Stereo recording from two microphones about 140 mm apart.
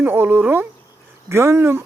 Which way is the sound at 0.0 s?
15° right (ahead or behind).